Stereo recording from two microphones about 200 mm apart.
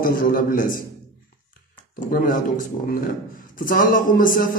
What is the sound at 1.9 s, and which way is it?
A man's voice, 45° left (ahead or behind).